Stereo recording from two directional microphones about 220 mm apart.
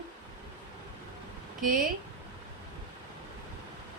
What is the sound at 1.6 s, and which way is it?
Speech, 40° right (ahead or behind).